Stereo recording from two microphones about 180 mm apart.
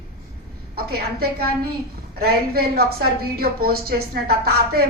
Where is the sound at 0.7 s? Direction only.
60° right (ahead or behind).